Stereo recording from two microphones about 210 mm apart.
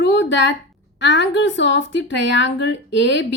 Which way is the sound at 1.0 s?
55° left (ahead or behind).